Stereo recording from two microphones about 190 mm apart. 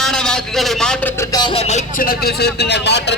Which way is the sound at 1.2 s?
20° left (ahead or behind).